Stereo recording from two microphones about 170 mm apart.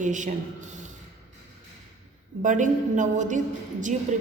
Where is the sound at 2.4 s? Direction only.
50° right (ahead or behind).